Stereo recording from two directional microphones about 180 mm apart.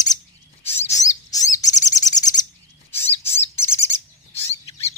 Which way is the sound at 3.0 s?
35° left (ahead or behind).